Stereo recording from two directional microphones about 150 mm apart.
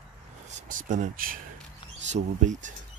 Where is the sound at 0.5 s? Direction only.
60° right (ahead or behind).